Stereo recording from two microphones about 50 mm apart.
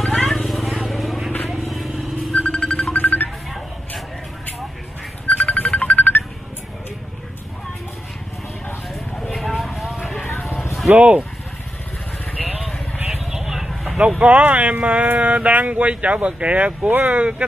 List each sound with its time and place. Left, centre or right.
0.3 s vehicle: centre
2.5 s music: left
5.3 s music: left
9.3 s a sound: centre
10.9 s speech: right
12.4 s vehicle: centre
13.9 s speech: centre
16.9 s speech: right
17.2 s speech: right